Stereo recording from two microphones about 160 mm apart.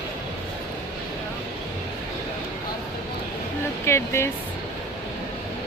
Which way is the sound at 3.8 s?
15° left (ahead or behind).